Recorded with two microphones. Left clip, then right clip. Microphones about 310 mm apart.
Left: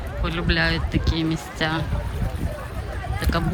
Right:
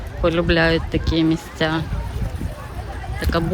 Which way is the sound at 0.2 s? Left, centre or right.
Centre.